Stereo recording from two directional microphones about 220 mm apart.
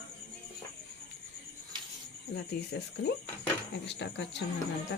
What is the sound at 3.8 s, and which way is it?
Speech, 50° left (ahead or behind).